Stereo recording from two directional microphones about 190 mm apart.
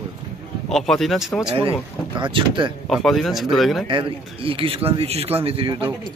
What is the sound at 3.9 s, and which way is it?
Speech, 25° right (ahead or behind).